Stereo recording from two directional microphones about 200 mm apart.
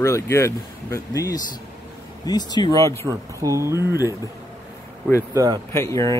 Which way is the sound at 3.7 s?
15° left (ahead or behind).